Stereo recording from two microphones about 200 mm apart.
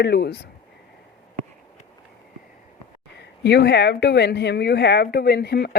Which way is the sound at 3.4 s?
55° left (ahead or behind).